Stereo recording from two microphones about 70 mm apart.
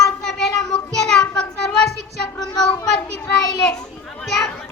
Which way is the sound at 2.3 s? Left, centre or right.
Left.